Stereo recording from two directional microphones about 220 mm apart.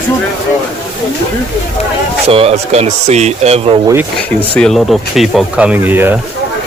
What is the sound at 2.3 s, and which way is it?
Speech, 25° right (ahead or behind).